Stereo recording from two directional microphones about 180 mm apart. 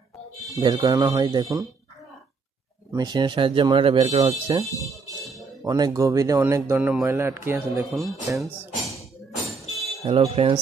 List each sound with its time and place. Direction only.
0.6 s speech: 25° right (ahead or behind)
2.9 s speech: 20° right (ahead or behind)
5.6 s speech: 20° right (ahead or behind)
7.7 s speech: centre (ahead or behind)
8.4 s music: centre (ahead or behind)
9.5 s a sound: centre (ahead or behind)
10.0 s speech: 30° right (ahead or behind)